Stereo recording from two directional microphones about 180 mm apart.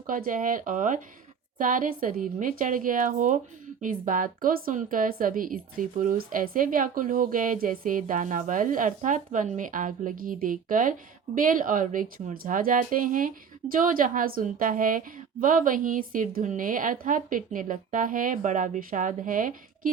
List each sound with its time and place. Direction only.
0.1 s a woman's voice: 50° right (ahead or behind)